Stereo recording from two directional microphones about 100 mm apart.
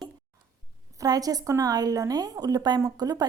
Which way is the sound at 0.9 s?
40° right (ahead or behind).